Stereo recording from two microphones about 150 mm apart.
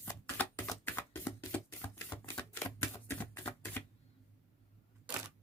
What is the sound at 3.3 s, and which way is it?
Typewriter, 15° left (ahead or behind).